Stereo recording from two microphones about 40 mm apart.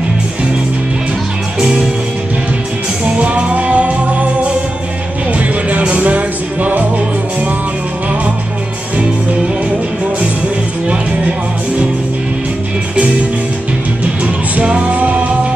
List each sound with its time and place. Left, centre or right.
1.6 s music: right
3.2 s music: right
5.4 s music: right
14.6 s music: right
15.0 s music: right